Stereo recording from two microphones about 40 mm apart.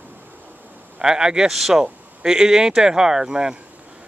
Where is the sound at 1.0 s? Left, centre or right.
Centre.